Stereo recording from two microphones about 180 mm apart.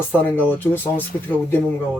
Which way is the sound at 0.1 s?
10° left (ahead or behind).